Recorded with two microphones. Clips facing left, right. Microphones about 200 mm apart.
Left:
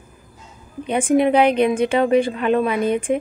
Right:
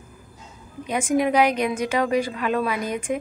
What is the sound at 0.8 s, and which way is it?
A woman's voice, 30° left (ahead or behind).